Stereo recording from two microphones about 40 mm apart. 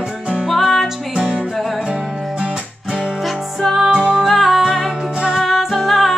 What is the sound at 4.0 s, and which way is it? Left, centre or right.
Music, right.